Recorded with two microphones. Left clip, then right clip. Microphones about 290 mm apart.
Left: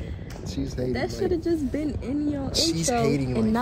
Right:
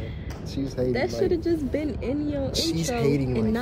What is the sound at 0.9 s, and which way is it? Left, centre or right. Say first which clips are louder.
Speech: right 1 dB; centre.